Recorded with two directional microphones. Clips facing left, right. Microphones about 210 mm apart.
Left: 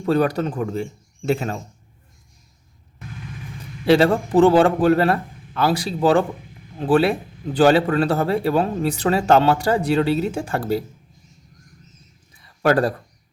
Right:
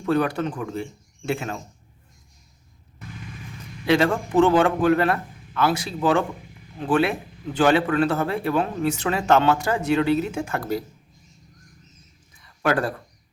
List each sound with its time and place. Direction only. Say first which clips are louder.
0.0 s a man's voice: left 3 dB; 35° left (ahead or behind)
3.8 s a man's voice: left 4 dB; 35° left (ahead or behind)
12.6 s a man's voice: left 5 dB; 35° left (ahead or behind)